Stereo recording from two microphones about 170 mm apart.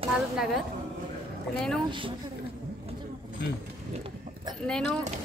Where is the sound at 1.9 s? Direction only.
30° right (ahead or behind).